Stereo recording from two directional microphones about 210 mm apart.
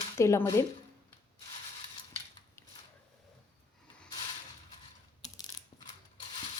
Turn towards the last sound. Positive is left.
turn(degrees=25)  # may be behind; listen again after turning